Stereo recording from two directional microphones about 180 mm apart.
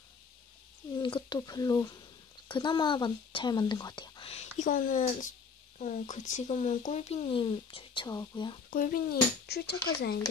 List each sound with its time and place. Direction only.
0.9 s speech: 25° left (ahead or behind)
8.6 s cutlery: 50° left (ahead or behind)